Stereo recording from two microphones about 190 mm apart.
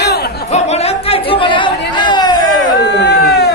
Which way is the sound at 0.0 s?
60° left (ahead or behind).